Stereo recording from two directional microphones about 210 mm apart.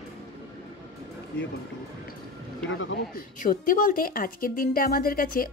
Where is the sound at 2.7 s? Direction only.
65° left (ahead or behind).